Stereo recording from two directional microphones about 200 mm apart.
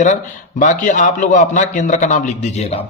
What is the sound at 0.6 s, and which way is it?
Speech, 40° left (ahead or behind).